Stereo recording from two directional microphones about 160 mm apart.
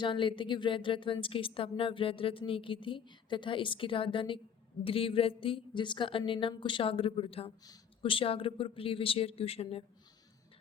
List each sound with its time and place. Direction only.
0.0 s a woman's voice: 30° left (ahead or behind)